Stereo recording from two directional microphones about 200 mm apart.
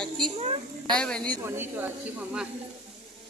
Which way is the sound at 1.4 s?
10° right (ahead or behind).